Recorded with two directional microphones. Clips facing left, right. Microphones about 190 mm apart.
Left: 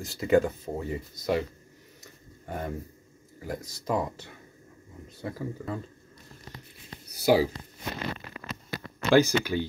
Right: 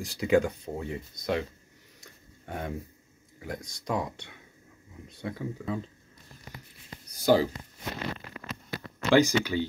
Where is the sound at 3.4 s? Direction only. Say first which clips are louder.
Left 2 dB; 5° left (ahead or behind).